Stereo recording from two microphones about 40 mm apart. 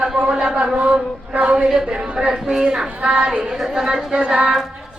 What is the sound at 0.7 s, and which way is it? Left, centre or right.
Speech, right.